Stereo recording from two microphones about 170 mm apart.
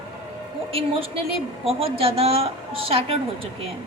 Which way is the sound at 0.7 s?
35° right (ahead or behind).